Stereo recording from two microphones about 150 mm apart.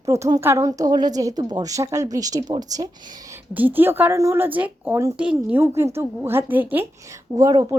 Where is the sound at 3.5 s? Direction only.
10° right (ahead or behind).